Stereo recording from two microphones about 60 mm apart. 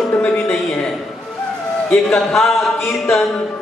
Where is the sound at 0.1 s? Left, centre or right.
Left.